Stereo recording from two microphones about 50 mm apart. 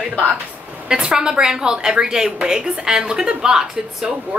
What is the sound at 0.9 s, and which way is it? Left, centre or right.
A woman's voice, centre.